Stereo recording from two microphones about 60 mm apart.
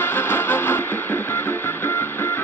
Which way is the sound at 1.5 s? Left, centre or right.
Left.